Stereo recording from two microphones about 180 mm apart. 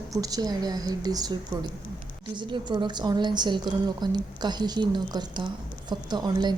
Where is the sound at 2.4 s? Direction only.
25° right (ahead or behind).